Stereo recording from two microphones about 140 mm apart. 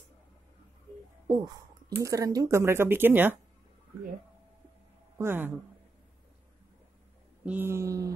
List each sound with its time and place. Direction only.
1.3 s speech: 25° right (ahead or behind)
5.1 s speech: 15° right (ahead or behind)
7.4 s speech: 15° right (ahead or behind)